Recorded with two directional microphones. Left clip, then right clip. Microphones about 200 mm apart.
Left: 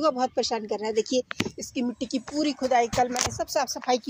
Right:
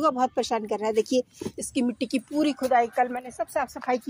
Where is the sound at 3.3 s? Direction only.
20° left (ahead or behind).